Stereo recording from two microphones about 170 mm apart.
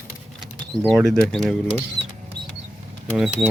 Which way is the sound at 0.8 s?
Centre (ahead or behind).